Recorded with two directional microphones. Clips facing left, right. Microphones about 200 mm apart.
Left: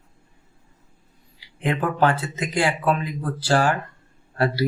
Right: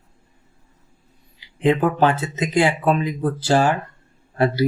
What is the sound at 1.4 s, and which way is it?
Speech, 20° right (ahead or behind).